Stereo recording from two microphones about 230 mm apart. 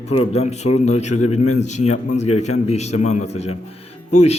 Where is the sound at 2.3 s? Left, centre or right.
Left.